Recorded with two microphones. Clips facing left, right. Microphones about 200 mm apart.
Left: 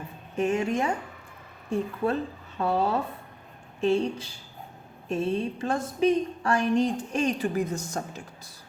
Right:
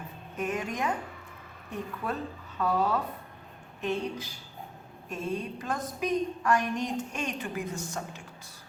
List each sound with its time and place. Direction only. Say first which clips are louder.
0.3 s speech: left 7 dB; 30° left (ahead or behind)
2.0 s a woman's voice: left 7 dB; 25° left (ahead or behind); by 8.2 s 40° left (ahead or behind)